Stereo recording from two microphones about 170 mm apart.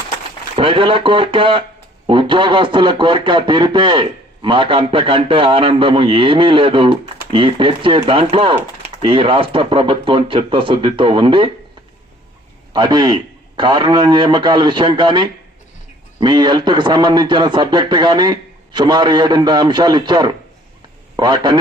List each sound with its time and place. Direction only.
0.5 s speech: 30° right (ahead or behind)
12.7 s speech: 25° right (ahead or behind)